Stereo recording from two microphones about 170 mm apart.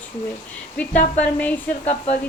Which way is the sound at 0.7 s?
10° left (ahead or behind).